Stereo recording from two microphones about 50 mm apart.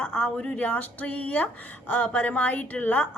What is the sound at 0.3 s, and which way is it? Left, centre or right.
Speech, left.